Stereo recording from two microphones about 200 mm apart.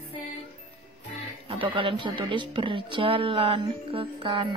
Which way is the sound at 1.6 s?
25° right (ahead or behind).